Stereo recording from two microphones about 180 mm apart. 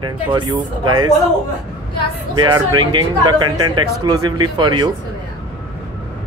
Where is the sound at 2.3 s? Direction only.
25° right (ahead or behind).